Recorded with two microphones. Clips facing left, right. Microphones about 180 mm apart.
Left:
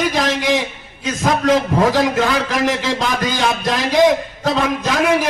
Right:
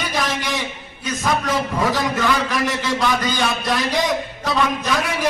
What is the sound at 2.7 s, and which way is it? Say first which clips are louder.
Speech: left 4 dB; 90° left.